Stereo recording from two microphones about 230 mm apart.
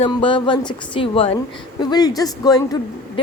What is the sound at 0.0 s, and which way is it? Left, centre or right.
A woman's voice, left.